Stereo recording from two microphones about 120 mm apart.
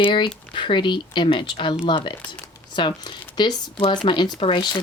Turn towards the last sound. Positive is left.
turn(degrees=40)  # may be behind; listen again after turning